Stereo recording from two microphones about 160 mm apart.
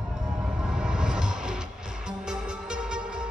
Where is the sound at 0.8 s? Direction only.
5° right (ahead or behind).